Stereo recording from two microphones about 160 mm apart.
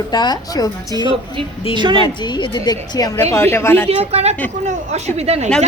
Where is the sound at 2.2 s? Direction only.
30° left (ahead or behind).